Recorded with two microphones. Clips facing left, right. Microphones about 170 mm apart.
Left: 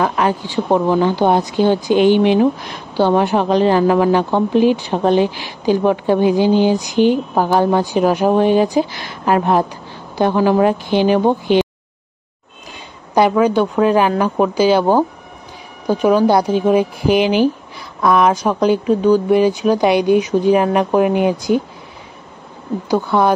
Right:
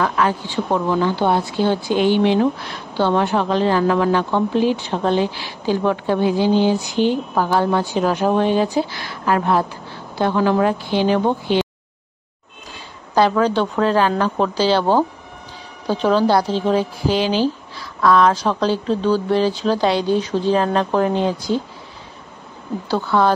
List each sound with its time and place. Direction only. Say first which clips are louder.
0.0 s speech: left 2 dB; 20° left (ahead or behind)
13.1 s a woman's voice: left 3 dB; 15° left (ahead or behind)
22.8 s speech: left 2 dB; 15° left (ahead or behind)